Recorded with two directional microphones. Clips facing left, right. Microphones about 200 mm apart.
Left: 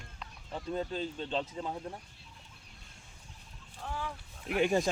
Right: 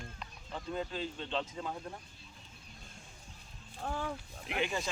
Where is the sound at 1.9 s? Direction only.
25° left (ahead or behind).